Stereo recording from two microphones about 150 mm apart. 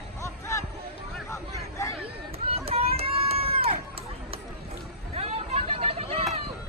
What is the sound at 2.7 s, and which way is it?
Run, 40° right (ahead or behind).